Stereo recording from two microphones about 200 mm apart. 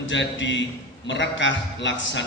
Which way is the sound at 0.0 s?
65° left (ahead or behind).